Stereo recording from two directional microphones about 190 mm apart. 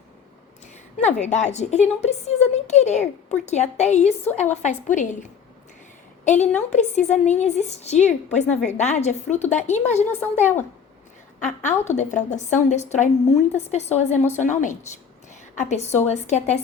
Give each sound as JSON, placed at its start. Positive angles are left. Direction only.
{"t": 0.9, "sound": "a woman's voice", "side_deg": 40}
{"t": 6.2, "sound": "a woman's voice", "side_deg": 40}
{"t": 11.4, "sound": "a woman's voice", "side_deg": 40}